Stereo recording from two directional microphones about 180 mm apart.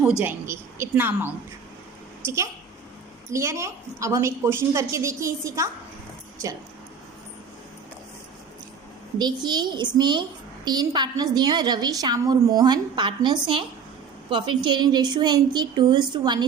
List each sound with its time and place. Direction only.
0.0 s a woman's voice: 5° right (ahead or behind)
9.1 s a woman's voice: 25° right (ahead or behind)